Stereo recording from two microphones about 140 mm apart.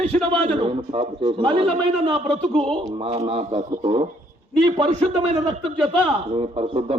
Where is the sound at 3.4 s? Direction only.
50° right (ahead or behind).